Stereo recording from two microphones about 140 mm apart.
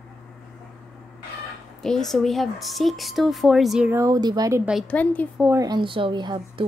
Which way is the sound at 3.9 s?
25° right (ahead or behind).